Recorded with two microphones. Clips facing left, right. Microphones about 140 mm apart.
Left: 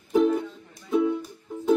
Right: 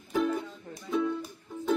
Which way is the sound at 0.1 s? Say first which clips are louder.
Left 7 dB; 20° left (ahead or behind).